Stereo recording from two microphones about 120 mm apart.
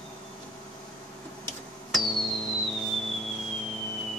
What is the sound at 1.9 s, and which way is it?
Music, centre (ahead or behind).